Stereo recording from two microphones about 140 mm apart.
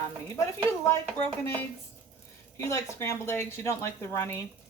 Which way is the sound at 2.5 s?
20° left (ahead or behind).